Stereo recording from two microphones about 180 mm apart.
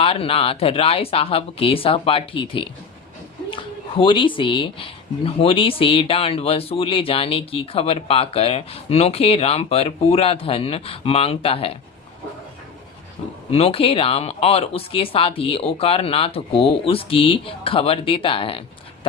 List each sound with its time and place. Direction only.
0.0 s speech: 30° left (ahead or behind)
13.5 s speech: 30° left (ahead or behind)